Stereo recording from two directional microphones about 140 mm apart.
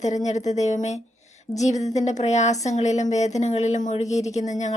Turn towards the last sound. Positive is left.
turn(degrees=60)  # may be behind; listen again after turning